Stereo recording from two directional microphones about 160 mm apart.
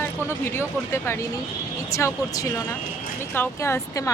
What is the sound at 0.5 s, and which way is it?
A woman's voice, 15° left (ahead or behind).